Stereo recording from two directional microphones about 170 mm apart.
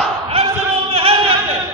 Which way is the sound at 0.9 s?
35° right (ahead or behind).